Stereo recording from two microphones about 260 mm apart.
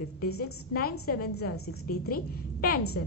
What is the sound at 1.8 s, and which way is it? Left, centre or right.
Speech, left.